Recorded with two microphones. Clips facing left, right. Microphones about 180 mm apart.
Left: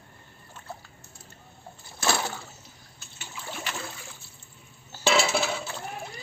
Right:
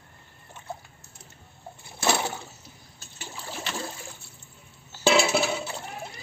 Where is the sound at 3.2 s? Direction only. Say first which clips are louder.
Right 1 dB; 35° right (ahead or behind).